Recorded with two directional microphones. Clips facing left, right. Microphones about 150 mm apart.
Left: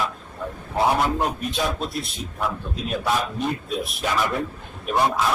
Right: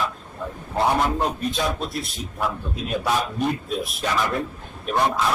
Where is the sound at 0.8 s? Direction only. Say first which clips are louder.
Even; centre (ahead or behind).